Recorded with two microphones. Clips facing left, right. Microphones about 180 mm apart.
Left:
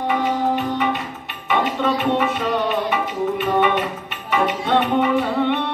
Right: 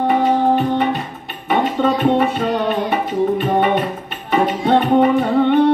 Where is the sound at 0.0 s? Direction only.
35° right (ahead or behind).